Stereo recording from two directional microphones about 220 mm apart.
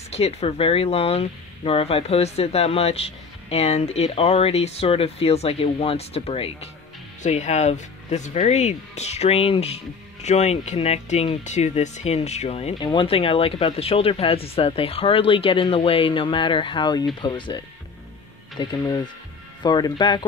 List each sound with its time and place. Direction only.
0.1 s speech: 30° left (ahead or behind)